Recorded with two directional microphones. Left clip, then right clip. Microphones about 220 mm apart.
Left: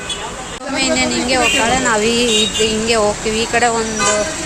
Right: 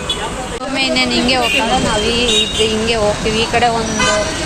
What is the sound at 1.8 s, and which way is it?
Speech, 40° left (ahead or behind).